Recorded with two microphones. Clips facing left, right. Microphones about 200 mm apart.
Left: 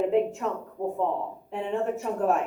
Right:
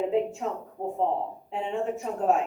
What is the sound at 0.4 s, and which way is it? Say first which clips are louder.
Speech: left 1 dB; 70° left (ahead or behind).